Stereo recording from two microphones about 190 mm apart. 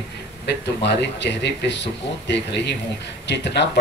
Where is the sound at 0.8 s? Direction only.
60° left (ahead or behind).